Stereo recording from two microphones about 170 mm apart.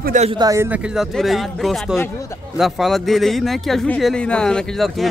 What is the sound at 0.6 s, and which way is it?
Speech, 5° right (ahead or behind).